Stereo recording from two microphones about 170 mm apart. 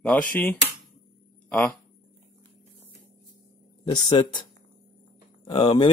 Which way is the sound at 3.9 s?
25° left (ahead or behind).